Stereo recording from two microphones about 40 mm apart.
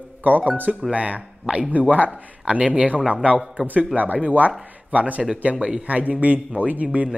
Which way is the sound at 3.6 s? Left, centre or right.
Right.